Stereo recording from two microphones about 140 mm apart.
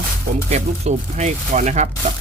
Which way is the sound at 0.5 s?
55° right (ahead or behind).